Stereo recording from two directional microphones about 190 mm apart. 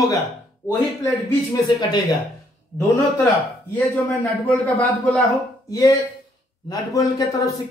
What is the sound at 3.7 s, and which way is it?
Speech, 10° left (ahead or behind).